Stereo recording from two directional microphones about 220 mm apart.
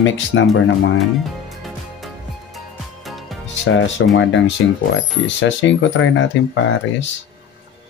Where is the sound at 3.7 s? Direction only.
60° left (ahead or behind).